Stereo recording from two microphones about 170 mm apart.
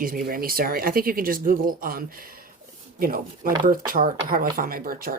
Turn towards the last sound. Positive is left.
turn(degrees=-55)  # may be behind; listen again after turning